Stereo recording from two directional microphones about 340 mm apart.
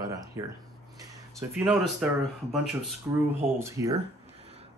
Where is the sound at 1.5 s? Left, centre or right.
Centre.